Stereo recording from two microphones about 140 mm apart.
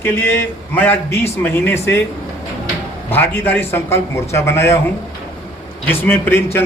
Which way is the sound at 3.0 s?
15° left (ahead or behind).